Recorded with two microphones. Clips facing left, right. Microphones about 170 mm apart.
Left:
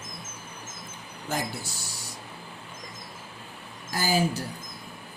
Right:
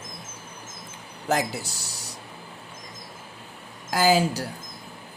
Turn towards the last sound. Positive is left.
turn(degrees=-75)  # may be behind; listen again after turning